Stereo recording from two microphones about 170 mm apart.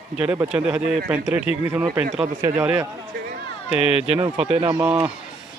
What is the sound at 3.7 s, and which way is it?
Speech, 35° left (ahead or behind).